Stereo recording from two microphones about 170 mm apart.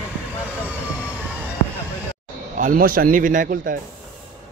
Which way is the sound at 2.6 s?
55° right (ahead or behind).